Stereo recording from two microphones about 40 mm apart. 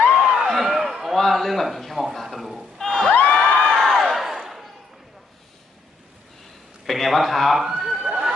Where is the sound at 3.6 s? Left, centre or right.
Centre.